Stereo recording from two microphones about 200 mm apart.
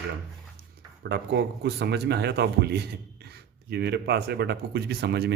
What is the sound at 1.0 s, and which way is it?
A man's voice, 55° right (ahead or behind).